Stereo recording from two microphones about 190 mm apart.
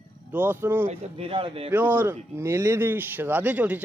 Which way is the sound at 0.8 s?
30° right (ahead or behind).